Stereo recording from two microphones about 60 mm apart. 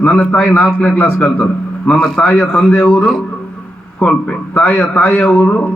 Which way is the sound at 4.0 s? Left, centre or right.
Left.